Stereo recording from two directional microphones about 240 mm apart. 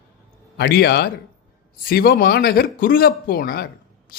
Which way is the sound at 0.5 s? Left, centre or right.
Left.